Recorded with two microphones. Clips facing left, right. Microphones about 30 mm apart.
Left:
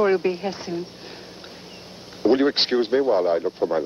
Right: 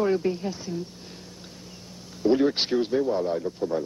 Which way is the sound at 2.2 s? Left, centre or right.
Left.